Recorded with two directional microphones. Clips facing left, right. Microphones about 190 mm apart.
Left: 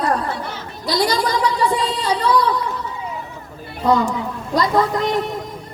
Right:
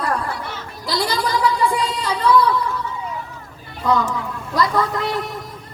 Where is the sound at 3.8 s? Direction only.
25° left (ahead or behind).